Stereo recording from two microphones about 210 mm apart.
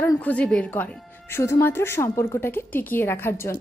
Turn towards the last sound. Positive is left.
turn(degrees=10)  # may be behind; listen again after turning